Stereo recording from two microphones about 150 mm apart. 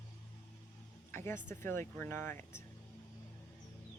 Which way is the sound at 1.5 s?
15° left (ahead or behind).